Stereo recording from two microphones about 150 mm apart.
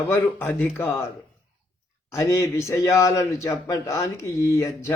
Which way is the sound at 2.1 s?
20° left (ahead or behind).